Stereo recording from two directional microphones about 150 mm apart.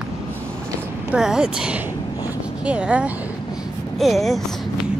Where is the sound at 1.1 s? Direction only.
5° right (ahead or behind).